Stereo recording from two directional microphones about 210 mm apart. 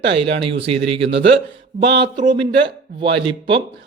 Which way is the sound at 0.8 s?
60° right (ahead or behind).